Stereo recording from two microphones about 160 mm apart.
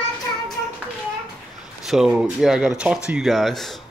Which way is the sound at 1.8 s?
Centre (ahead or behind).